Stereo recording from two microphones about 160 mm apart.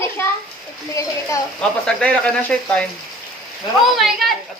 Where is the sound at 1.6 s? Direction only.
5° left (ahead or behind).